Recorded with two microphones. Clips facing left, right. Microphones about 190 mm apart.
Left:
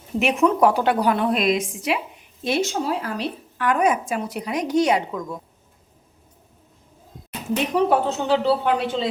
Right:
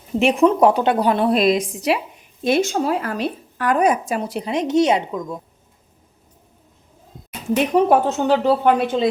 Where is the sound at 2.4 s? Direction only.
50° right (ahead or behind); by 5.2 s 25° right (ahead or behind).